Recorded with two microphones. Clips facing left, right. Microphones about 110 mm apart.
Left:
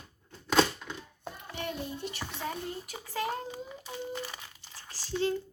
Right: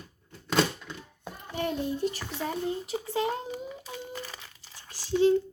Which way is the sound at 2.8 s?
25° right (ahead or behind).